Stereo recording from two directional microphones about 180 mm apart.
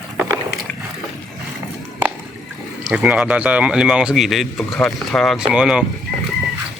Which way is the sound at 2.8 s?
5° right (ahead or behind).